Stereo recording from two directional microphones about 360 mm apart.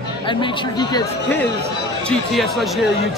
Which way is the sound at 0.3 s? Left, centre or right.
Centre.